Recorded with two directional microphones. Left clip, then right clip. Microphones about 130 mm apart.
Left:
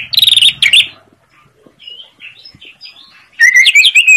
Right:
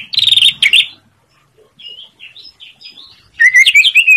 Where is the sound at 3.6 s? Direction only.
30° right (ahead or behind).